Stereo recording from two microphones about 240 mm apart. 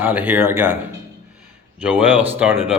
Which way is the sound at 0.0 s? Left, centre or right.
Centre.